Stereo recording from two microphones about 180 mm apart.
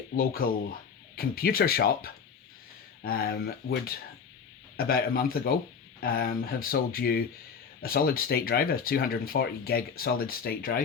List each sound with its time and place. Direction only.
0.4 s speech: 55° left (ahead or behind)